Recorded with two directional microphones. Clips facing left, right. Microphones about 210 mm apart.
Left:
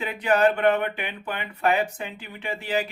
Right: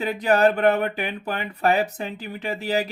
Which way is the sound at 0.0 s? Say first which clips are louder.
Right 2 dB; 40° right (ahead or behind).